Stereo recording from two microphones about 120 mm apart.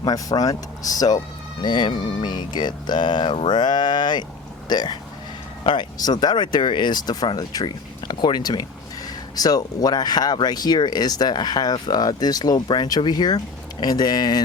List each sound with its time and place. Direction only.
0.0 s speech: 30° left (ahead or behind)